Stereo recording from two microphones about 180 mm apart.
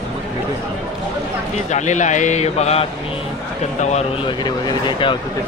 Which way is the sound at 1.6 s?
40° left (ahead or behind).